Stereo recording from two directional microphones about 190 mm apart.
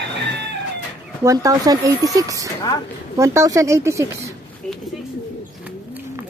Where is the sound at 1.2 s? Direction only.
20° right (ahead or behind).